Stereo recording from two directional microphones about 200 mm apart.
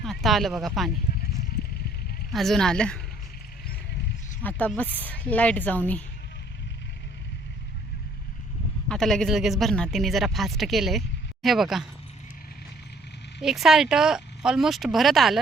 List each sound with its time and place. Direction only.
0.0 s speech: centre (ahead or behind)
2.3 s speech: centre (ahead or behind)
4.4 s speech: 10° left (ahead or behind)
8.9 s speech: centre (ahead or behind)
13.4 s speech: centre (ahead or behind)